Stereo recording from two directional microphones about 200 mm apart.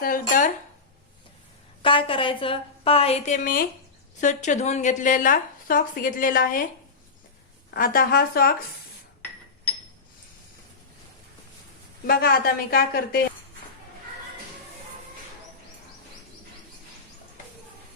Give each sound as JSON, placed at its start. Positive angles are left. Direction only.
{"t": 0.0, "sound": "speech", "side_deg": 45}
{"t": 1.8, "sound": "a woman's voice", "side_deg": 25}
{"t": 7.7, "sound": "a woman's voice", "side_deg": 45}
{"t": 12.0, "sound": "a woman's voice", "side_deg": 50}